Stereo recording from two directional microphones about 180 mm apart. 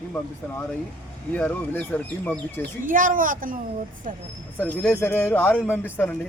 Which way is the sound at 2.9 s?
50° right (ahead or behind).